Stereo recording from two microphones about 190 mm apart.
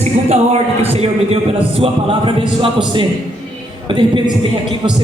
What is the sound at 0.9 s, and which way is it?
A man's voice, 30° right (ahead or behind).